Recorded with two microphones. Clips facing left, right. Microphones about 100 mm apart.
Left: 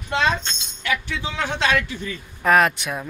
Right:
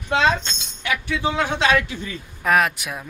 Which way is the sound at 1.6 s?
15° right (ahead or behind).